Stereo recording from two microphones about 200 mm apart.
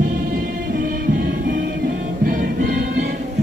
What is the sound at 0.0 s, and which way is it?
Music, 45° right (ahead or behind).